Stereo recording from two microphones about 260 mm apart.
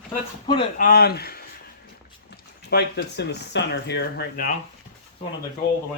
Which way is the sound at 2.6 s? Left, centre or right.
Left.